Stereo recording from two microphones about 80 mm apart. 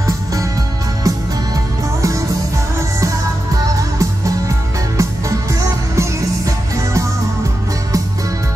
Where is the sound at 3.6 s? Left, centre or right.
Right.